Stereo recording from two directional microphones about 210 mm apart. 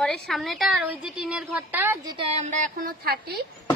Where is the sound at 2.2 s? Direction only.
35° right (ahead or behind).